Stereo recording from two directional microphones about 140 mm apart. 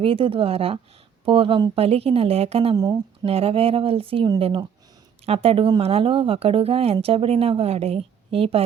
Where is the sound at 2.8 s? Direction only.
30° right (ahead or behind).